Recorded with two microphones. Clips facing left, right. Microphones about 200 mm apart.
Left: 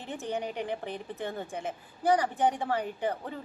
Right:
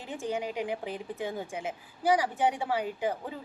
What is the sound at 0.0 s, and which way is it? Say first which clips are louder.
A woman's voice: right 1 dB; 10° right (ahead or behind).